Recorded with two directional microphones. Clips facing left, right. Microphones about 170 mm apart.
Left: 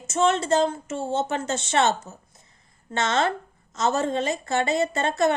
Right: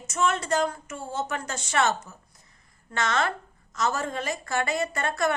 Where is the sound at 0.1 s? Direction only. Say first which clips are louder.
Left 5 dB; 25° left (ahead or behind).